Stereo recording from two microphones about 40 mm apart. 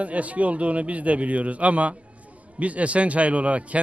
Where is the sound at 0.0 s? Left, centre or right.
Right.